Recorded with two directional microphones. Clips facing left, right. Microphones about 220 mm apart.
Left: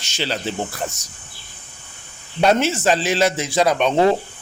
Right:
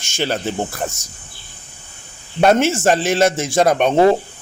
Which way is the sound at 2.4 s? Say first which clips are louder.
Right 3 dB; 50° right (ahead or behind).